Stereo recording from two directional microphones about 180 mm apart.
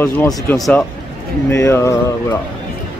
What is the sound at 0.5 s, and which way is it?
Speech, centre (ahead or behind).